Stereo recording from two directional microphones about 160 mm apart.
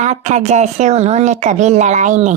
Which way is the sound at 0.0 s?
45° right (ahead or behind).